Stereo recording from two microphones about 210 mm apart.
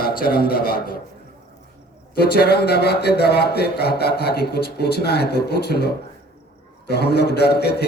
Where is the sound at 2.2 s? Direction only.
50° left (ahead or behind).